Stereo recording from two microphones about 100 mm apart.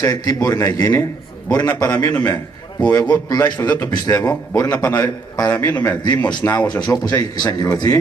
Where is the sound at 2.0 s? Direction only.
30° left (ahead or behind).